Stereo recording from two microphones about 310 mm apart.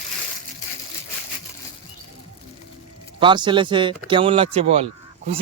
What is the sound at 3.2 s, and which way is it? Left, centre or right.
A man's voice, centre.